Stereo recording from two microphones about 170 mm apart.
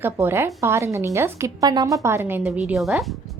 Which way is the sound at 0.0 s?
15° right (ahead or behind).